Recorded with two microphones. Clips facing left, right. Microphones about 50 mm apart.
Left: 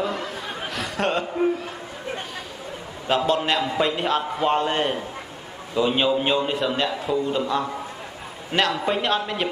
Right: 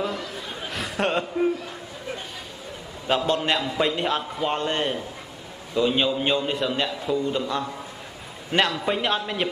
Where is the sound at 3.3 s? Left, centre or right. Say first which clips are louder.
Left 2 dB; centre.